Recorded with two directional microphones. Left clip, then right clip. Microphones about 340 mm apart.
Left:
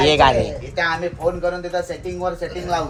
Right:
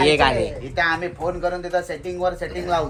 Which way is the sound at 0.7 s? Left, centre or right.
Right.